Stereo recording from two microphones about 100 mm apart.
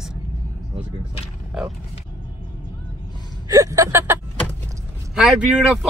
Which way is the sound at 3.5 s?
35° right (ahead or behind).